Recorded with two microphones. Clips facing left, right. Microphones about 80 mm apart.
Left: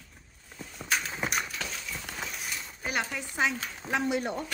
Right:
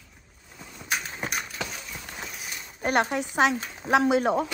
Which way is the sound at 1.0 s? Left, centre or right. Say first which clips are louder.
Left 1 dB; centre.